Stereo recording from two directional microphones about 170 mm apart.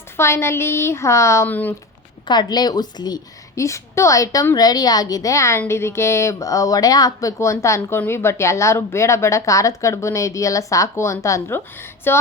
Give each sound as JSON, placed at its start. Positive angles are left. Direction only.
{"t": 0.2, "sound": "a woman's voice", "side_deg": 15}
{"t": 2.2, "sound": "a woman's voice", "side_deg": 25}